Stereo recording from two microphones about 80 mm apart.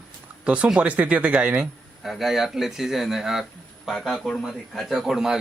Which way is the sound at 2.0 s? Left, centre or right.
Centre.